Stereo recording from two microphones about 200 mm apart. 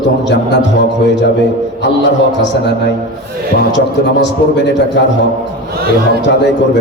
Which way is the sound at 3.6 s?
60° left (ahead or behind).